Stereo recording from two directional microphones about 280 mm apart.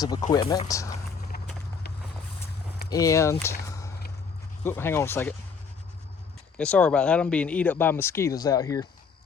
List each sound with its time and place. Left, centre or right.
0.0 s speech: centre
1.3 s run: left
2.9 s speech: centre
3.7 s whip: centre
4.6 s speech: centre
6.6 s speech: centre